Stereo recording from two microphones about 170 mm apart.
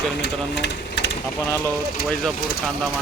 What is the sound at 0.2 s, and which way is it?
Speech, 80° left.